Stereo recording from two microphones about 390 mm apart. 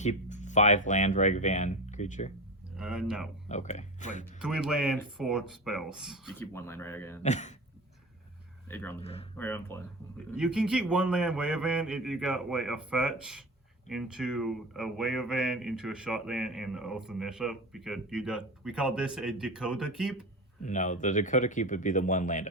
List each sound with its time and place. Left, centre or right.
0.0 s speech: centre
2.7 s speech: centre
3.5 s speech: centre
4.4 s speech: centre
7.2 s speech: centre
8.7 s speech: centre
20.6 s speech: centre